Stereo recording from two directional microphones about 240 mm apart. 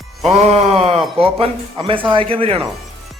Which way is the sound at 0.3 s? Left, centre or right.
Right.